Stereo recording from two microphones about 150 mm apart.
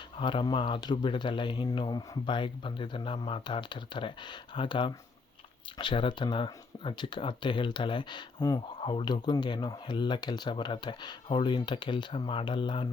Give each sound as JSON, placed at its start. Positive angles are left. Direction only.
{"t": 0.2, "sound": "speech", "side_deg": 35}